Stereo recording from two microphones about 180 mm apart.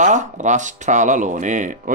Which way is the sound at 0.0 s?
45° right (ahead or behind).